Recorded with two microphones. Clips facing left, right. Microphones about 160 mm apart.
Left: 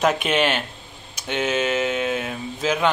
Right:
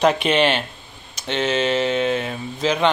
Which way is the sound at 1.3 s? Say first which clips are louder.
Right 2 dB; 10° left (ahead or behind).